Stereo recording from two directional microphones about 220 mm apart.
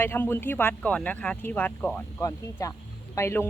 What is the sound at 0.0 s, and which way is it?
Speech, 10° left (ahead or behind).